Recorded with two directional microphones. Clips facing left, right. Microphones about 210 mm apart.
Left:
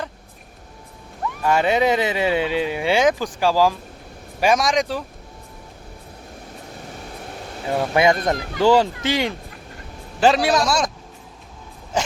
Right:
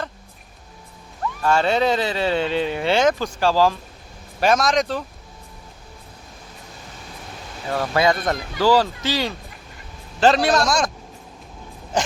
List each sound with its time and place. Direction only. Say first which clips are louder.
1.4 s speech: left 1 dB; 15° left (ahead or behind)
7.7 s speech: left 2 dB; 20° left (ahead or behind)
10.2 s speech: even; 10° left (ahead or behind)